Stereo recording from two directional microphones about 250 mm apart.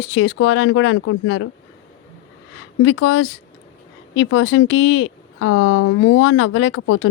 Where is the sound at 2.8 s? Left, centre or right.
Left.